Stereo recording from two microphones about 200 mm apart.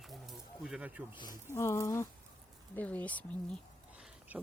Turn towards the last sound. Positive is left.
turn(degrees=-10)  # may be behind; listen again after turning